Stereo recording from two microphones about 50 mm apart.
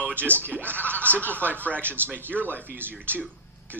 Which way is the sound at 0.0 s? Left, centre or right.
Right.